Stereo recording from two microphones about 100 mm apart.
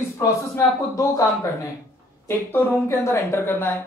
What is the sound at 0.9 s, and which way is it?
A man's voice, 30° left (ahead or behind).